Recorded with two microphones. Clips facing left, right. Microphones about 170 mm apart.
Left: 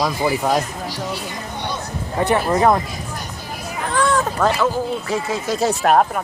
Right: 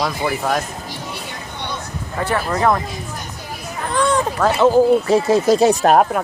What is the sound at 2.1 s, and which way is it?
Speech, 20° left (ahead or behind).